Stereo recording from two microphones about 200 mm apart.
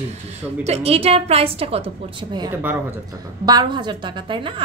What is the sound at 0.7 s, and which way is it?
A woman's voice, 30° right (ahead or behind).